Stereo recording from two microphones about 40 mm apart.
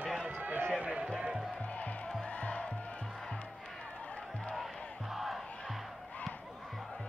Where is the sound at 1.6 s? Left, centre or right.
Left.